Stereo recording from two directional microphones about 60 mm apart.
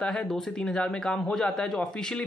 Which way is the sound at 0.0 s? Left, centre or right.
Centre.